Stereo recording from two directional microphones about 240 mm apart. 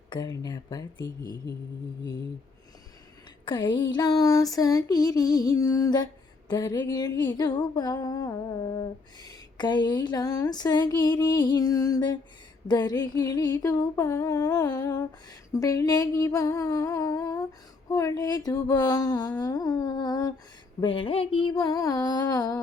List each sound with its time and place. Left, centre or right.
0.1 s humming: centre
3.4 s a sound: centre
3.9 s humming: centre